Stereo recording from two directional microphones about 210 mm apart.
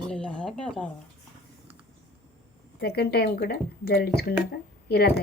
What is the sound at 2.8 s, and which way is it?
A woman's voice, 50° left (ahead or behind).